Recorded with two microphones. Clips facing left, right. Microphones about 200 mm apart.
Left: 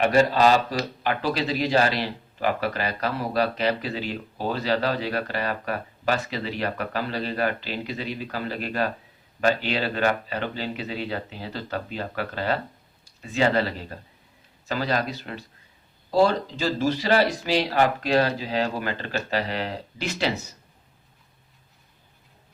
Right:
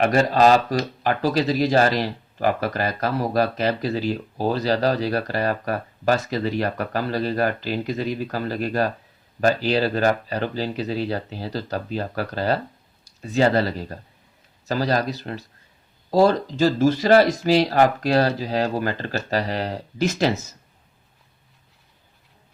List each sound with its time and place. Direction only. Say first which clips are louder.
0.0 s speech: right 2 dB; 40° right (ahead or behind)